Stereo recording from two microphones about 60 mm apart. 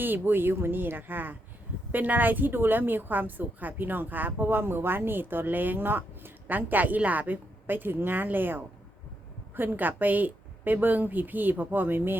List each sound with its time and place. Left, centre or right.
0.0 s a woman's voice: right